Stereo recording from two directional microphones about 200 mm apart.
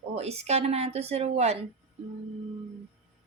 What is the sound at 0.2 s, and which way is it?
A woman's voice, 30° right (ahead or behind).